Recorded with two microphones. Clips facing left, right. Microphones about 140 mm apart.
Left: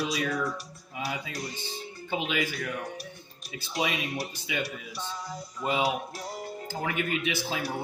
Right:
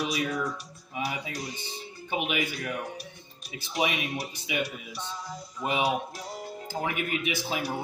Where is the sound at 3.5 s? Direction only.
15° right (ahead or behind).